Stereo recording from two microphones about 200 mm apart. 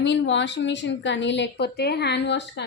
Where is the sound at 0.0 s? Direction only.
65° left (ahead or behind).